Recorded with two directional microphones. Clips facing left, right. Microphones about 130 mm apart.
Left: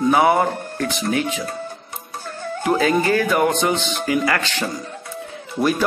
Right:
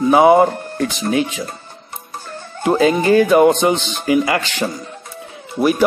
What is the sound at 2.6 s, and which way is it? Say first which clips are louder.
A man's voice: right 4 dB; 20° right (ahead or behind).